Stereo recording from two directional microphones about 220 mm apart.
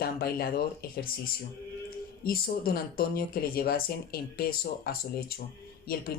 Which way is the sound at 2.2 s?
45° left (ahead or behind).